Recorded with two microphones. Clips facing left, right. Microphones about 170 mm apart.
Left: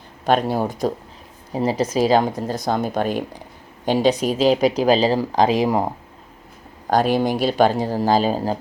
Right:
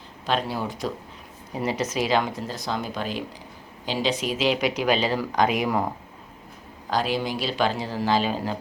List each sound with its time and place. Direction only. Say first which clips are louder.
0.3 s speech: left 7 dB; 50° left (ahead or behind)
1.5 s speech: left 6 dB; 30° left (ahead or behind)
2.6 s speech: left 8 dB; 50° left (ahead or behind); by 5.9 s 25° left (ahead or behind)
6.9 s speech: left 7 dB; 50° left (ahead or behind)